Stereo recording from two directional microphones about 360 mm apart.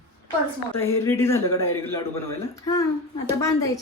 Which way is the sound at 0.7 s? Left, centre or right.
Centre.